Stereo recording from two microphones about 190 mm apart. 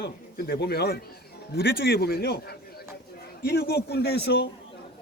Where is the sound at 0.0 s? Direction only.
55° left (ahead or behind).